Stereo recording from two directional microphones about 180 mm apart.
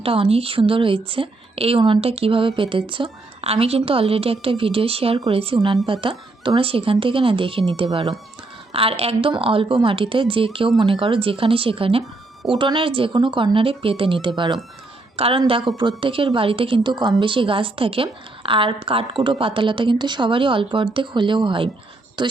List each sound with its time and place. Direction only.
0.0 s a woman's voice: 30° right (ahead or behind)
8.7 s a woman's voice: 30° right (ahead or behind)